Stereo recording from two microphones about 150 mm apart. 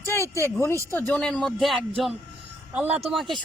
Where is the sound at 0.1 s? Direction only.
20° left (ahead or behind).